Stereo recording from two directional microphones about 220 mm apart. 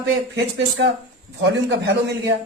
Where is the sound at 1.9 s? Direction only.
50° right (ahead or behind).